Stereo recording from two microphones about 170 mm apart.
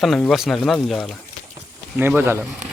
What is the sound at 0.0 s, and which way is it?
Speech, centre (ahead or behind).